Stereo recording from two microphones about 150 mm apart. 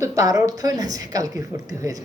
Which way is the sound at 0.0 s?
20° right (ahead or behind).